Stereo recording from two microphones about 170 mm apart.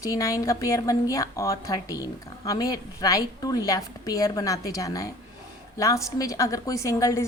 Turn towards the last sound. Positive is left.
turn(degrees=20)  # may be behind; listen again after turning